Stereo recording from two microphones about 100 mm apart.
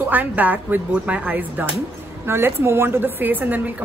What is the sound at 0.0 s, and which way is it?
A woman's voice, 15° right (ahead or behind).